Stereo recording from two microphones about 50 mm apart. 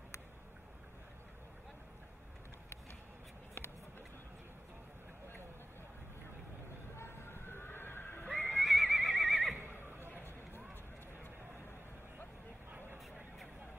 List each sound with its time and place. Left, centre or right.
7.0 s neigh: left
8.3 s neigh: left
8.5 s neigh: centre